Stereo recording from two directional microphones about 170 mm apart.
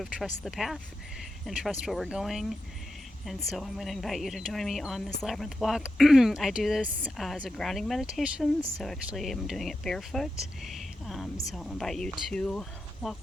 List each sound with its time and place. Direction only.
0.4 s a woman's voice: centre (ahead or behind)